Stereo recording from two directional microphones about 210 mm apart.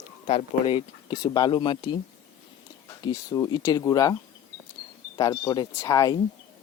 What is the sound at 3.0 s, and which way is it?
Speech, 20° left (ahead or behind).